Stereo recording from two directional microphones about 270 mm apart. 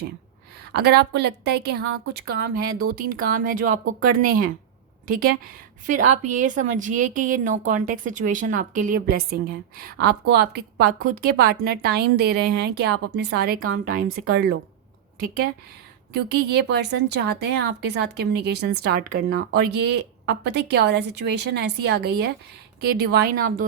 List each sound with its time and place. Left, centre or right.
0.6 s a woman's voice: right
16.1 s a woman's voice: right